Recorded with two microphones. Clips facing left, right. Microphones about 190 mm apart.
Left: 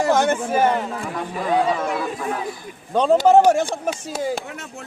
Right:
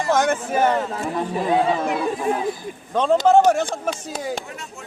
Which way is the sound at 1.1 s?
30° right (ahead or behind).